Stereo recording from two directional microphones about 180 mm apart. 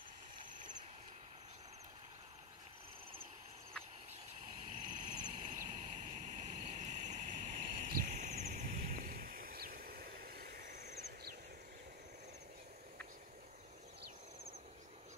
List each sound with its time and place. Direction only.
4.6 s vehicle: 45° right (ahead or behind); by 10.6 s 60° right (ahead or behind)